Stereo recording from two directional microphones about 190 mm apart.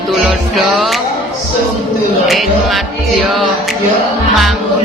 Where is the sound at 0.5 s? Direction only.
Centre (ahead or behind).